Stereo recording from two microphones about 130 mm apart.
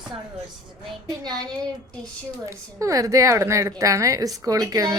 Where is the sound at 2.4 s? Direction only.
25° right (ahead or behind).